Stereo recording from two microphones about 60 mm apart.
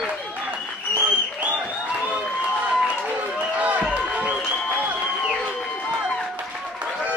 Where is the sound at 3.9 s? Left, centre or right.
Right.